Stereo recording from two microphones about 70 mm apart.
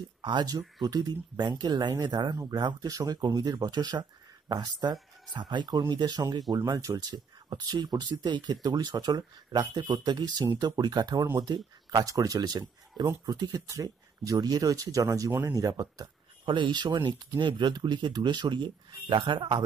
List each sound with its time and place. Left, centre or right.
0.2 s speech: right
4.5 s speech: right
12.1 s speech: right
16.7 s speech: right